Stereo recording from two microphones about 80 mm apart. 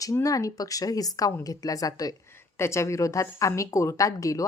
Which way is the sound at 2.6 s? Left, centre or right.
Left.